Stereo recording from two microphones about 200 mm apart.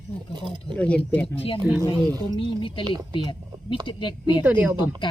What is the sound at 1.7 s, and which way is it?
Speech, 50° left (ahead or behind).